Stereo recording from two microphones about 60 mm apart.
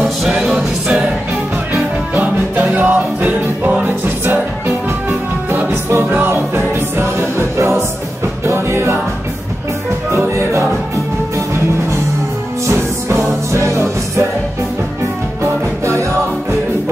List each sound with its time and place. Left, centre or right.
0.3 s music: centre
1.7 s music: right
10.1 s music: right
12.6 s music: right
15.4 s music: right